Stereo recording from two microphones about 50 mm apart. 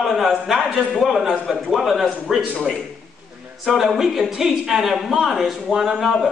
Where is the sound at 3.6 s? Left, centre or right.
Centre.